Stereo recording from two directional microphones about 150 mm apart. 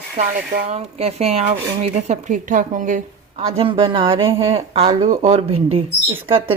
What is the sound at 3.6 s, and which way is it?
Speech, 35° right (ahead or behind).